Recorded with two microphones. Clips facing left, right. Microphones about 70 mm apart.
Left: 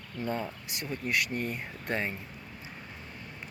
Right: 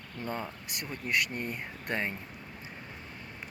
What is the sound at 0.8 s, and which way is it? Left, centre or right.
Speech, right.